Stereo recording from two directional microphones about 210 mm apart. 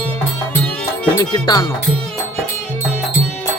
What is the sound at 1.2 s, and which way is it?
Music, 20° left (ahead or behind).